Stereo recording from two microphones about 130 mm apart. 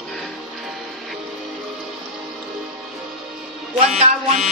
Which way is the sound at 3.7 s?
55° right (ahead or behind).